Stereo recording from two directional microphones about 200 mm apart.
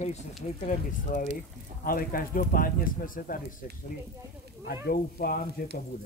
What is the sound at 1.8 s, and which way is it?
Speech, 45° left (ahead or behind).